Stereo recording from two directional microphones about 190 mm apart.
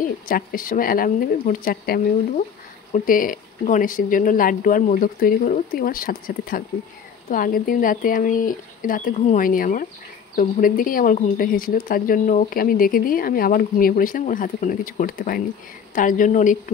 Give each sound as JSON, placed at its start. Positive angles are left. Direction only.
{"t": 0.3, "sound": "speech", "side_deg": 50}